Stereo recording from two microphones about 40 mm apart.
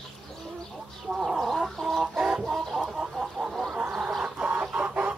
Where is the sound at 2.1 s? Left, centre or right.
Centre.